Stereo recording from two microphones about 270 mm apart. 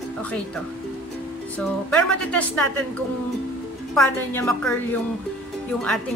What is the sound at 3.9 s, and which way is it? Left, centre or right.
Music, centre.